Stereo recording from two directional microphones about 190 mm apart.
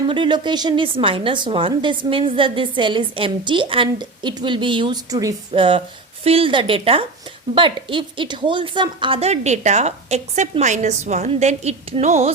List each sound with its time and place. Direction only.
0.1 s a woman's voice: 25° right (ahead or behind)